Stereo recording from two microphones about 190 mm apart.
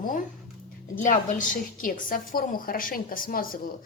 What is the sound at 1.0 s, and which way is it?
A woman's voice, 45° left (ahead or behind).